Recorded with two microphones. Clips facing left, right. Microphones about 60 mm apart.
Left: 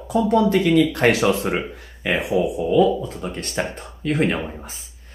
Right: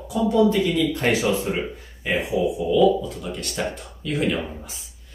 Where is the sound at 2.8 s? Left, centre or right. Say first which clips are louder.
Right 2 dB; left.